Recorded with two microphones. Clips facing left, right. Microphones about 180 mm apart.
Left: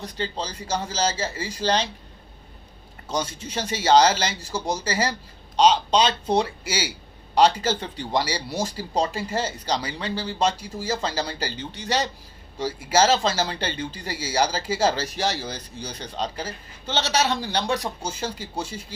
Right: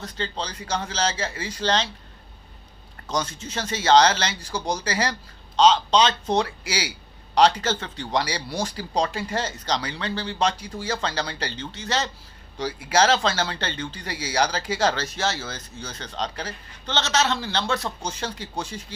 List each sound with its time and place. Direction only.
0.0 s speech: 10° left (ahead or behind)
3.1 s speech: 10° left (ahead or behind)